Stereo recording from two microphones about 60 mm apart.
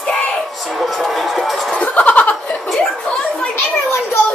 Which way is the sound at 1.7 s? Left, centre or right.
Left.